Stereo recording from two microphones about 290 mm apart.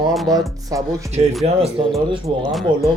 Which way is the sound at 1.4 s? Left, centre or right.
Centre.